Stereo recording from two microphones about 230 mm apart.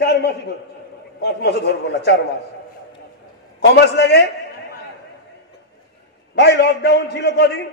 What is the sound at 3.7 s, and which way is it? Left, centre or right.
Speech, left.